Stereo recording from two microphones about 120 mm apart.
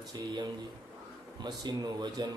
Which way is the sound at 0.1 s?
35° right (ahead or behind).